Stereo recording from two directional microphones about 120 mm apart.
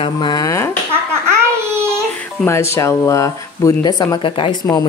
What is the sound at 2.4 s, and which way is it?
Speech, 25° left (ahead or behind).